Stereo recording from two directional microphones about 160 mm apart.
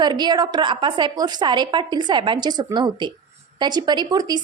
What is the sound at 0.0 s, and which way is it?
A woman's voice, 25° right (ahead or behind).